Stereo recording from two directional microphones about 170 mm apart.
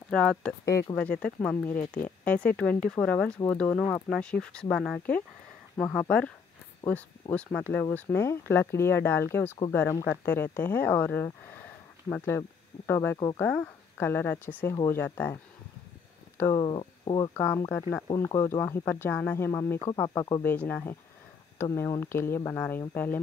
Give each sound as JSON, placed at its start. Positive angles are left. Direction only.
{"t": 0.1, "sound": "speech", "side_deg": 5}
{"t": 0.7, "sound": "speech", "side_deg": 20}
{"t": 0.9, "sound": "speech", "side_deg": 5}
{"t": 14.7, "sound": "speech", "side_deg": 25}
{"t": 15.0, "sound": "speech", "side_deg": 10}
{"t": 16.3, "sound": "speech", "side_deg": 15}
{"t": 16.6, "sound": "speech", "side_deg": 30}
{"t": 17.4, "sound": "speech", "side_deg": 15}
{"t": 20.4, "sound": "speech", "side_deg": 10}